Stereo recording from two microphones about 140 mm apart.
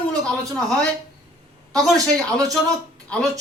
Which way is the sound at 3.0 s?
5° left (ahead or behind).